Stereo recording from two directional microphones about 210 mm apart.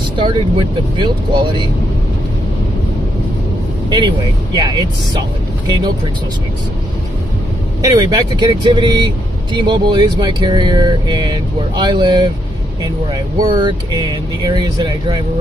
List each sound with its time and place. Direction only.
0.1 s speech: 20° right (ahead or behind)
4.6 s speech: 20° right (ahead or behind)
7.8 s speech: 15° right (ahead or behind)